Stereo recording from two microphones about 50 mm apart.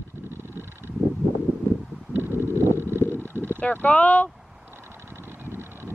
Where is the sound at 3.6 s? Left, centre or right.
Left.